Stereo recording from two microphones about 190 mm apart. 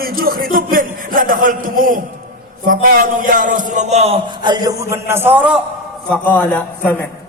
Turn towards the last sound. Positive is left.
turn(degrees=10)  # may be behind; listen again after turning